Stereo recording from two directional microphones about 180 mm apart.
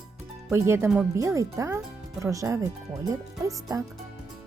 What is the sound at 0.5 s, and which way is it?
Speech, 15° right (ahead or behind).